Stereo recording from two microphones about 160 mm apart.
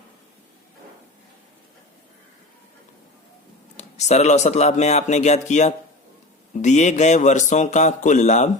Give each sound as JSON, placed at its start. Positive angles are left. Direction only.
{"t": 3.8, "sound": "a man's voice", "side_deg": 45}